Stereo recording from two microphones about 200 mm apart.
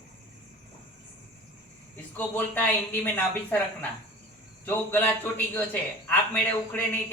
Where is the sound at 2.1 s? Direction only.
10° left (ahead or behind).